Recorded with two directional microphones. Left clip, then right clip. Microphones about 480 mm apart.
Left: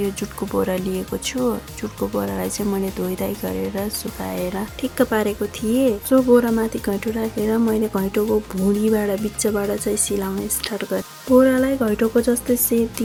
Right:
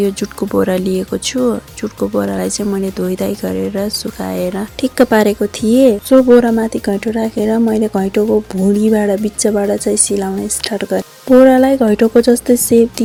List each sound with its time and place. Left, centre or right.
0.0 s speech: left